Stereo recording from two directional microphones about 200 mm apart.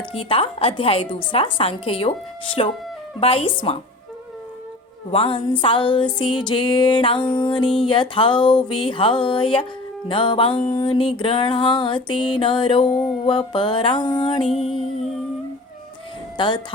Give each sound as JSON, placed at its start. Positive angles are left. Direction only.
{"t": 0.1, "sound": "music", "side_deg": 25}
{"t": 5.1, "sound": "music", "side_deg": 25}
{"t": 12.8, "sound": "a sound", "side_deg": 0}
{"t": 13.2, "sound": "music", "side_deg": 25}
{"t": 16.4, "sound": "music", "side_deg": 25}